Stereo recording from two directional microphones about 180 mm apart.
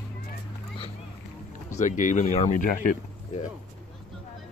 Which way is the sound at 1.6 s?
45° left (ahead or behind).